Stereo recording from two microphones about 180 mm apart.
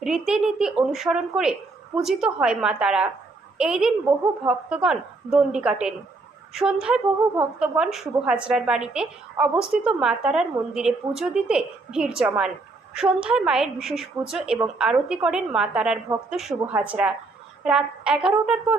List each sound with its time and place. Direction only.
0.0 s a woman's voice: 5° right (ahead or behind)